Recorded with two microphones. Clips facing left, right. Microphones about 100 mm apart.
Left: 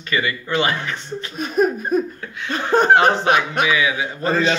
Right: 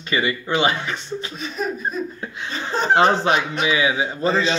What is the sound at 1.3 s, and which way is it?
Speech, 50° left (ahead or behind).